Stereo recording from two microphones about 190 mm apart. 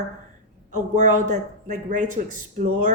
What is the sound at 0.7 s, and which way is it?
Speech, 40° right (ahead or behind).